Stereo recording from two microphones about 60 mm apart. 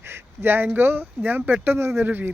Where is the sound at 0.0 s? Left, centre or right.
Right.